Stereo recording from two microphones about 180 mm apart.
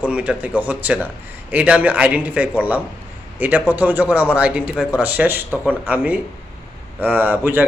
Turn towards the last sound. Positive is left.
turn(degrees=-10)  # may be behind; listen again after turning